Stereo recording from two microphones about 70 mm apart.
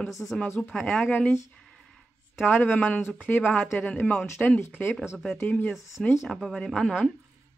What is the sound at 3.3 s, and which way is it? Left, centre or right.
Speech, left.